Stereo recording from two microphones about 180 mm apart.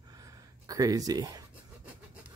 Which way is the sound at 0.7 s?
20° right (ahead or behind).